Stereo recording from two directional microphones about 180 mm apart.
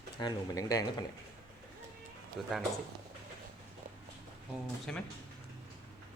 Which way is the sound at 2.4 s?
Centre (ahead or behind).